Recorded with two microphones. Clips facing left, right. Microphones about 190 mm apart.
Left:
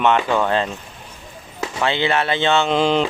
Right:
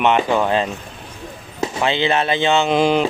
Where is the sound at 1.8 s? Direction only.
20° right (ahead or behind).